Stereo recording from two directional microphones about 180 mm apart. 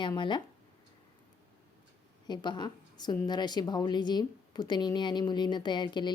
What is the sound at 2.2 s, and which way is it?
A woman's voice, 25° left (ahead or behind).